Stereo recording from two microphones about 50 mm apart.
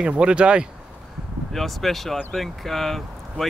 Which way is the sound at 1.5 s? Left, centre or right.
Centre.